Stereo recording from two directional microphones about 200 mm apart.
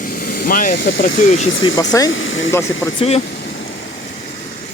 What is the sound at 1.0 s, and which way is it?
Speech, 40° left (ahead or behind).